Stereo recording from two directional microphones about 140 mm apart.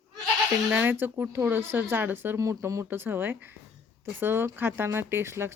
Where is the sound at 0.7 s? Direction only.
15° right (ahead or behind).